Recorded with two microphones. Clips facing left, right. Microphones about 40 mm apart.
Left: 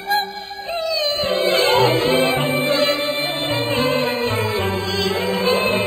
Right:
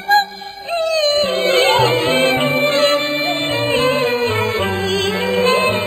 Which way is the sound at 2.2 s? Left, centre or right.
Right.